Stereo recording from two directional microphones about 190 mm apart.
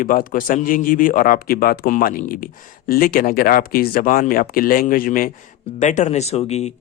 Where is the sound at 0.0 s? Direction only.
45° left (ahead or behind).